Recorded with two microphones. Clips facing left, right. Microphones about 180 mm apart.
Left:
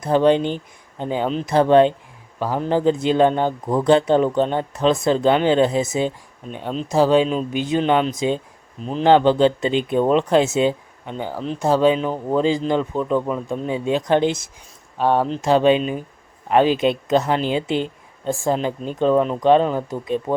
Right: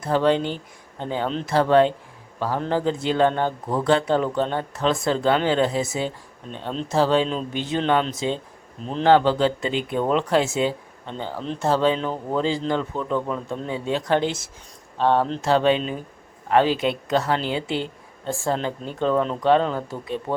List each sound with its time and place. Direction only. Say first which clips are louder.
0.0 s speech: left 4 dB; 20° left (ahead or behind)
8.8 s speech: left 3 dB; 5° left (ahead or behind)
9.0 s speech: left 3 dB; 20° left (ahead or behind)